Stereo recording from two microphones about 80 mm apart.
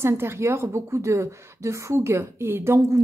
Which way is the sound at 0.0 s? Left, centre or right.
Right.